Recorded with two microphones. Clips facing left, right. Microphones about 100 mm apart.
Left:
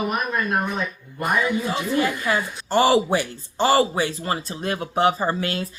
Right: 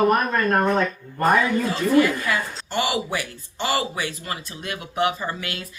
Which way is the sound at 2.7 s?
35° left (ahead or behind).